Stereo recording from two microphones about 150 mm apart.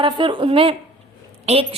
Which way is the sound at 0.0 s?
35° right (ahead or behind).